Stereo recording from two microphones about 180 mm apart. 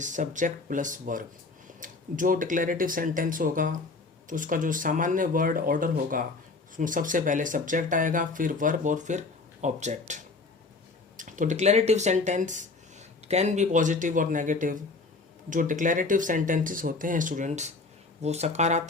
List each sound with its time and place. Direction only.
0.0 s speech: 45° right (ahead or behind)